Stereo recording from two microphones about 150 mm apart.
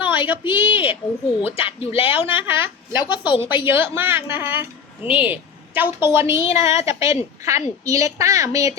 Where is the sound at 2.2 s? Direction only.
15° right (ahead or behind).